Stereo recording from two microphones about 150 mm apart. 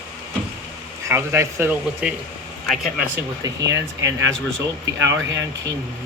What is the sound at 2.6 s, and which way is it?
Speech, centre (ahead or behind).